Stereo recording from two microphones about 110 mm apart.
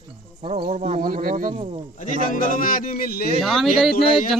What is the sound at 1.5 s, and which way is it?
Speech, 60° right (ahead or behind).